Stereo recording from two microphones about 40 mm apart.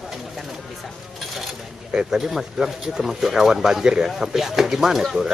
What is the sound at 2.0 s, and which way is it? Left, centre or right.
Speech, centre.